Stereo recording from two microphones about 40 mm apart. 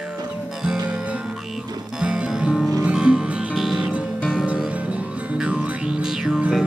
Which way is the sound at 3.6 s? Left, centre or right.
Centre.